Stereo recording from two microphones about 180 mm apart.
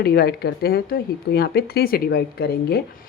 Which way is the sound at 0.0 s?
60° left (ahead or behind).